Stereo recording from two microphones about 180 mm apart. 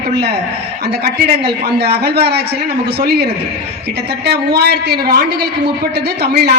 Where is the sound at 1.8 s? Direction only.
65° right (ahead or behind).